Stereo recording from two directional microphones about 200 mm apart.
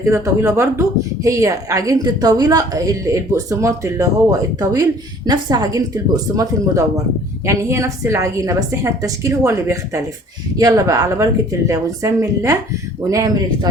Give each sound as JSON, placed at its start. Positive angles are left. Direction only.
{"t": 0.0, "sound": "a woman's voice", "side_deg": -15}